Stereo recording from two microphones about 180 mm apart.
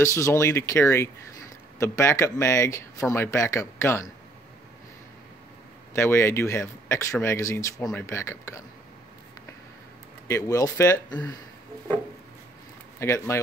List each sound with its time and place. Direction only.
0.0 s speech: 15° left (ahead or behind)
5.9 s speech: 15° left (ahead or behind)
10.2 s speech: 15° left (ahead or behind)
13.0 s speech: 15° left (ahead or behind)